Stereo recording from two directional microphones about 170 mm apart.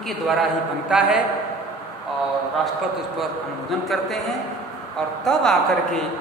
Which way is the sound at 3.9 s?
Centre (ahead or behind).